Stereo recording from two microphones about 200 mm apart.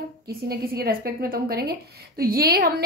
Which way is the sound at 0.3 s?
50° right (ahead or behind).